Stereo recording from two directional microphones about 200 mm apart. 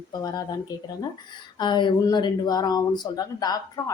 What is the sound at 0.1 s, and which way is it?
Speech, 20° left (ahead or behind).